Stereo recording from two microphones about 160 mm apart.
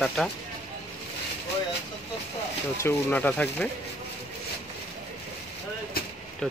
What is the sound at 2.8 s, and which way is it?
Speech, 15° left (ahead or behind).